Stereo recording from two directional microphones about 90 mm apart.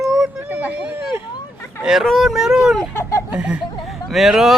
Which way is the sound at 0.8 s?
20° right (ahead or behind).